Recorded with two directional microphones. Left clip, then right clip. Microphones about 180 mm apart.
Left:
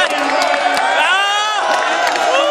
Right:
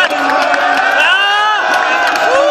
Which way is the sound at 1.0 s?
35° left (ahead or behind).